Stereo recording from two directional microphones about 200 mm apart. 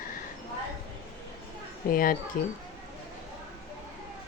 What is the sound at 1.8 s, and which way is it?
Speech, 45° left (ahead or behind).